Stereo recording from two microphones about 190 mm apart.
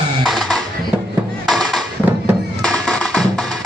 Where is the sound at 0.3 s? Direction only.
Centre (ahead or behind).